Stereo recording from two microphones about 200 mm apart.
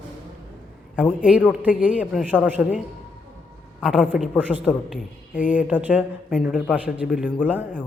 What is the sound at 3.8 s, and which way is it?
A woman's voice, centre (ahead or behind).